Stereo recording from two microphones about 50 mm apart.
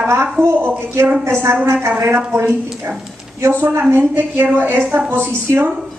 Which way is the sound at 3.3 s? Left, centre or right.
Right.